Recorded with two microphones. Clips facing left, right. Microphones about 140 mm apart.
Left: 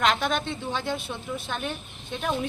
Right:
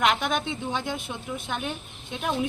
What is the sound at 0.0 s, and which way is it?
A woman's voice, 15° right (ahead or behind).